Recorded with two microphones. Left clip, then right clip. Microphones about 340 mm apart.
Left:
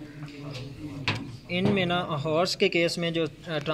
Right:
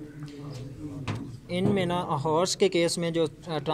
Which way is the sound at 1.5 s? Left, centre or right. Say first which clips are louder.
Left 1 dB; right.